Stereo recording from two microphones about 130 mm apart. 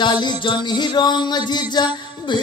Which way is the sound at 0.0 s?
35° left (ahead or behind).